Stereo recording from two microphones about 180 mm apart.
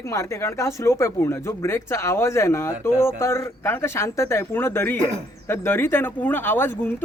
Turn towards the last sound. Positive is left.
turn(degrees=10)  # may be behind; listen again after turning